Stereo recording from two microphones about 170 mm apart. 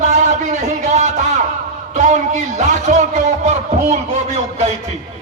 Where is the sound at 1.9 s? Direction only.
45° right (ahead or behind).